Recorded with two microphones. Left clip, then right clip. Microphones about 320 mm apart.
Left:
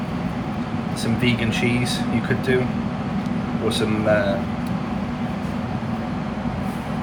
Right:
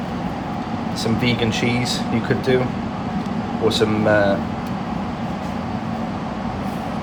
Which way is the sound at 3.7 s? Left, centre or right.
Centre.